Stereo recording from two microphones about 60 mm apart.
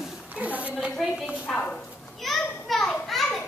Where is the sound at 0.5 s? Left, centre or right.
Right.